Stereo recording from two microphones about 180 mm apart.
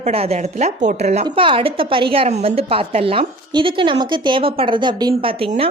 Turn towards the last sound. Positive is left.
turn(degrees=-30)  # may be behind; listen again after turning